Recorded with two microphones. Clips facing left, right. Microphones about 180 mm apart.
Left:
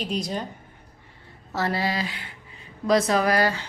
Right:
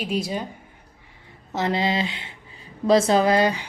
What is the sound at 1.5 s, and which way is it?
Speech, 20° right (ahead or behind).